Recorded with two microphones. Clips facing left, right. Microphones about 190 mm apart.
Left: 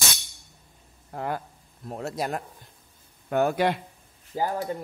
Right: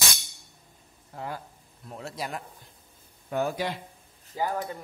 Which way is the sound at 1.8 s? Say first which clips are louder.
Left 6 dB; 45° left (ahead or behind).